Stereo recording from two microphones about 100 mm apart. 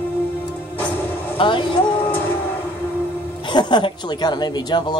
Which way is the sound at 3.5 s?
50° left (ahead or behind).